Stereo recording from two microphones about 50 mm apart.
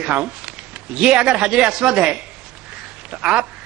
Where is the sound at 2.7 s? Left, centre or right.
Centre.